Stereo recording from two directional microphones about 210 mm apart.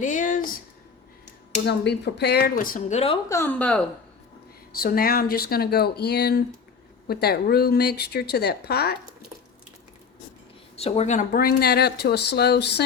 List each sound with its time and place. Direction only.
0.0 s a sound: 35° left (ahead or behind)
1.6 s speech: 55° left (ahead or behind)
3.2 s speech: 10° left (ahead or behind)
4.7 s speech: 45° left (ahead or behind)
10.8 s speech: 30° left (ahead or behind); by 12.8 s 50° left (ahead or behind)